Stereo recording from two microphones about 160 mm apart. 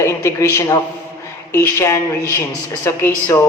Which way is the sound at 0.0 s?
15° left (ahead or behind).